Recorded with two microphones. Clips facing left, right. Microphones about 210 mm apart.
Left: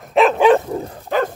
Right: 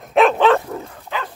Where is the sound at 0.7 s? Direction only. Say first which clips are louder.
Left 8 dB; 35° left (ahead or behind).